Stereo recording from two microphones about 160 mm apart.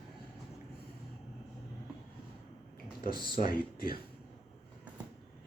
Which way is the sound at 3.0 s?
65° left (ahead or behind).